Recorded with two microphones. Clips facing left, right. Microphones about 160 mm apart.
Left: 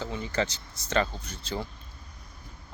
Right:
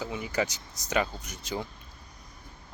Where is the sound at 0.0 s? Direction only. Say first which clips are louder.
Even; 15° right (ahead or behind).